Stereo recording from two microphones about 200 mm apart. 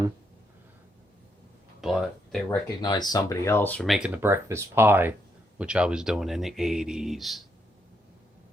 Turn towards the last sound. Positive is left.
turn(degrees=0)  # may be behind; listen again after turning